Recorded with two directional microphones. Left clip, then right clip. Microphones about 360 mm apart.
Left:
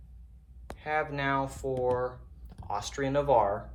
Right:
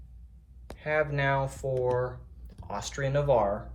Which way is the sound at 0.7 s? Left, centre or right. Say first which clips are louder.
Right 3 dB; centre.